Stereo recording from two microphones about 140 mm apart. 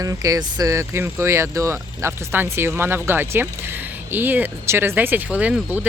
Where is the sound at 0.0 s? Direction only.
25° right (ahead or behind).